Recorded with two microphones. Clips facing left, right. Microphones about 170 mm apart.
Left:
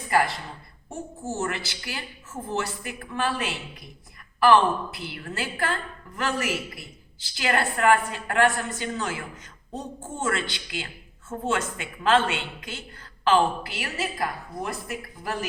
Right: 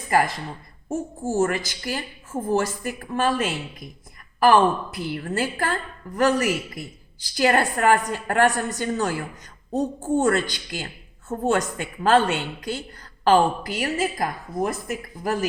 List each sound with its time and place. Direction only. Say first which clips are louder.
0.1 s a woman's voice: right 2 dB; 45° right (ahead or behind)
1.4 s a woman's voice: right 9 dB; 45° right (ahead or behind)